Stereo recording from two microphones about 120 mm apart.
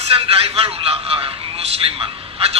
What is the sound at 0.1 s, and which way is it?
A man's voice, 55° right (ahead or behind).